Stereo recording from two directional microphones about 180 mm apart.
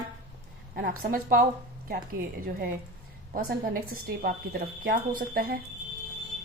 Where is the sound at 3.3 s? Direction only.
55° right (ahead or behind).